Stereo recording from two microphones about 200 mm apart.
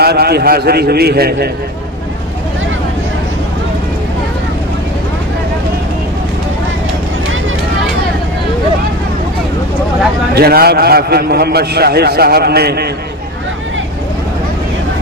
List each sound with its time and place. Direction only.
0.0 s a man's voice: 50° right (ahead or behind)
10.3 s a man's voice: 50° right (ahead or behind)